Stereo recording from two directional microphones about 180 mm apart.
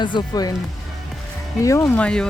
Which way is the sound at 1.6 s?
15° left (ahead or behind).